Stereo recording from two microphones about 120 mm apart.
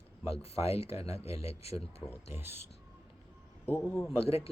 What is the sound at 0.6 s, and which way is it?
Speech, 60° left (ahead or behind).